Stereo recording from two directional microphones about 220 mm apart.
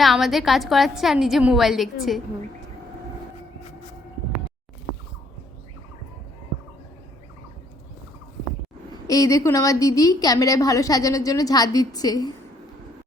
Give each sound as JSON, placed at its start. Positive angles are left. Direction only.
{"t": 0.0, "sound": "a woman's voice", "side_deg": 0}
{"t": 9.0, "sound": "a woman's voice", "side_deg": 15}